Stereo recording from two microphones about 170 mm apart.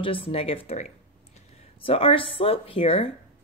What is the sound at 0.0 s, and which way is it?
Speech, 30° left (ahead or behind).